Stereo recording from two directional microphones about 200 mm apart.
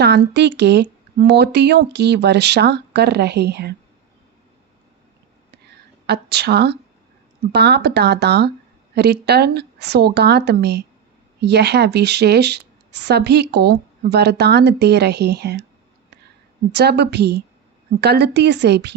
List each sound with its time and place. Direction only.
0.0 s a woman's voice: 55° right (ahead or behind)
6.1 s a woman's voice: 55° right (ahead or behind)
16.7 s a woman's voice: 55° right (ahead or behind)